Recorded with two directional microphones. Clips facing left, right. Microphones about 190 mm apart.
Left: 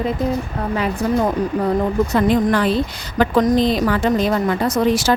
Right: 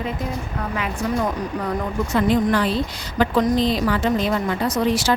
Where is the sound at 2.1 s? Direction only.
50° left (ahead or behind).